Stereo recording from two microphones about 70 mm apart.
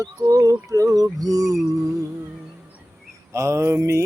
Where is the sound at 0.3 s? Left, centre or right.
Right.